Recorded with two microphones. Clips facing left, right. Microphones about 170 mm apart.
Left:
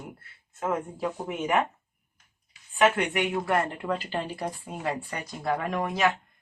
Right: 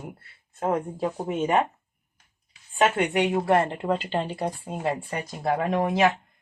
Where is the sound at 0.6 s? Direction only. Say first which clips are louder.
Right 3 dB; 35° right (ahead or behind).